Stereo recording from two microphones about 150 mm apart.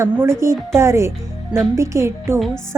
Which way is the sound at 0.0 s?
20° right (ahead or behind).